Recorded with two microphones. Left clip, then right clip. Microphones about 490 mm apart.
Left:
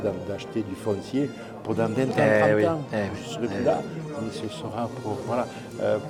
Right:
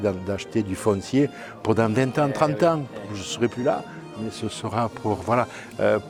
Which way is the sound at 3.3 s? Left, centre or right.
Right.